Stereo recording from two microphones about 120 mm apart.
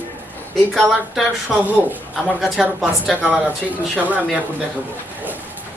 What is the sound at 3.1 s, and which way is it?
Speech, 15° right (ahead or behind).